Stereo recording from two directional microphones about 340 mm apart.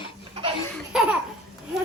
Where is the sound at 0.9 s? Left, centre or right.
Centre.